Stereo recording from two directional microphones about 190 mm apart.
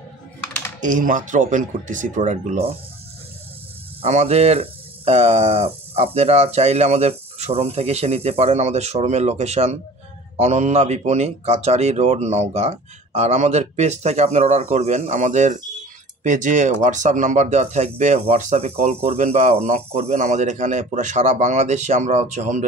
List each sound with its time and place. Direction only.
0.7 s speech: 45° right (ahead or behind)
4.0 s speech: 35° right (ahead or behind)